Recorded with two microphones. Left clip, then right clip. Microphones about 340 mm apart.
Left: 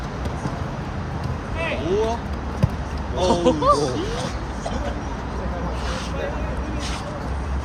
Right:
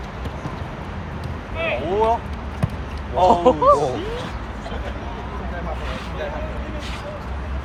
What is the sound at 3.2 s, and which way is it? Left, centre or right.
Speech, centre.